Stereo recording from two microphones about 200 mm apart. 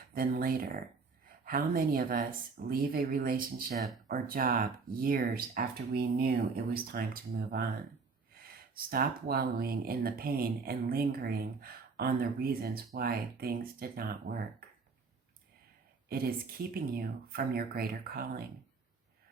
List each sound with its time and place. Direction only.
0.1 s speech: 45° right (ahead or behind)
16.0 s speech: 50° right (ahead or behind)